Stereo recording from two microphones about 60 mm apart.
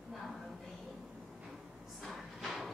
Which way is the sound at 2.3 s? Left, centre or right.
Centre.